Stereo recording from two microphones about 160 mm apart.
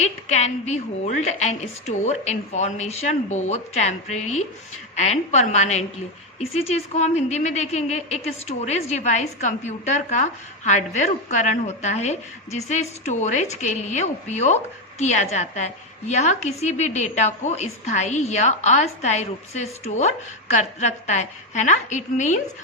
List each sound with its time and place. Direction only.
0.0 s a woman's voice: 45° left (ahead or behind)